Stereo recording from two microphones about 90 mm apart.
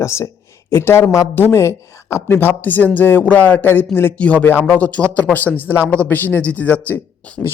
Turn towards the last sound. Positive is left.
turn(degrees=20)  # may be behind; listen again after turning